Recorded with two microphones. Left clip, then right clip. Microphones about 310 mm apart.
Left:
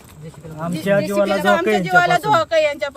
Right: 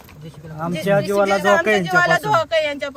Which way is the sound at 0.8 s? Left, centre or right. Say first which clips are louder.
Even; centre.